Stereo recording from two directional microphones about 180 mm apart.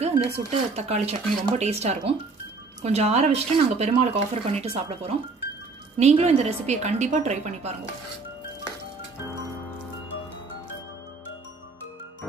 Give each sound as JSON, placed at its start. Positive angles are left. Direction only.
{"t": 0.0, "sound": "speech", "side_deg": -35}